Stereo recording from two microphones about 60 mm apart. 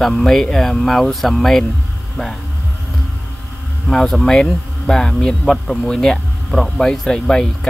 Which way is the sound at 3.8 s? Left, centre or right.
Centre.